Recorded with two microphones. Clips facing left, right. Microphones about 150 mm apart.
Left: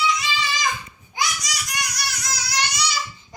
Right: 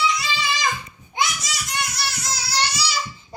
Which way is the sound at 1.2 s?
25° right (ahead or behind).